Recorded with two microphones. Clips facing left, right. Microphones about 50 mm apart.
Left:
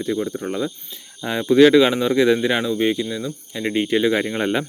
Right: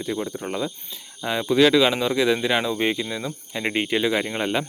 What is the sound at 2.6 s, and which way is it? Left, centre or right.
Speech, centre.